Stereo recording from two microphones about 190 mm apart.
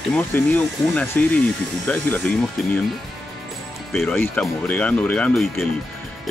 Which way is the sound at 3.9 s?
Centre (ahead or behind).